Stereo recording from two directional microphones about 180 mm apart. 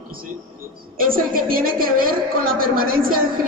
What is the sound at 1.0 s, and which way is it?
A woman's voice, 50° right (ahead or behind).